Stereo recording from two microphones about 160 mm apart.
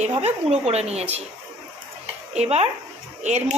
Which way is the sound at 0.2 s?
40° right (ahead or behind).